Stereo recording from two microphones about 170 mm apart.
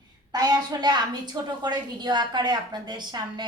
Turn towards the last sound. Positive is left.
turn(degrees=-25)  # may be behind; listen again after turning